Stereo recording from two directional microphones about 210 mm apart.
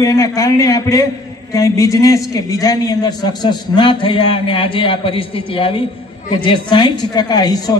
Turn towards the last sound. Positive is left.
turn(degrees=20)  # may be behind; listen again after turning